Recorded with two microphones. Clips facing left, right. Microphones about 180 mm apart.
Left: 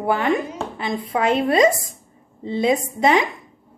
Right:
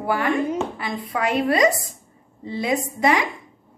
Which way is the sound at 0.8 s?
25° left (ahead or behind).